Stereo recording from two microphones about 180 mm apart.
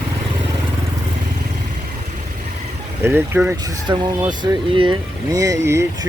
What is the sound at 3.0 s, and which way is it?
Speech, 10° right (ahead or behind).